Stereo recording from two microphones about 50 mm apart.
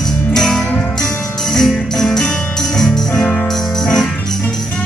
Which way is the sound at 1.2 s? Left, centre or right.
Centre.